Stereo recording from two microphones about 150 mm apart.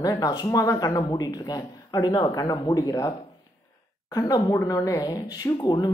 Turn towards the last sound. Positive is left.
turn(degrees=30)  # may be behind; listen again after turning